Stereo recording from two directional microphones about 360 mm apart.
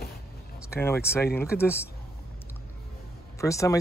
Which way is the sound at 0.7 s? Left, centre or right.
Centre.